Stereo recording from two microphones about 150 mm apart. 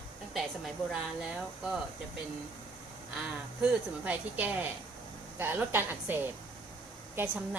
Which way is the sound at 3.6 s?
10° right (ahead or behind).